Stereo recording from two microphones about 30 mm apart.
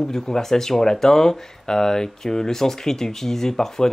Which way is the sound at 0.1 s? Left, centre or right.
Centre.